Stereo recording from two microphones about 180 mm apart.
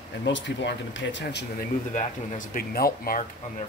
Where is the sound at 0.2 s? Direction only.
85° left; by 1.7 s 65° left (ahead or behind).